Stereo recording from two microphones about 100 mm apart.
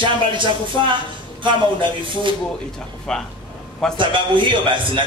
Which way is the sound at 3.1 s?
10° left (ahead or behind).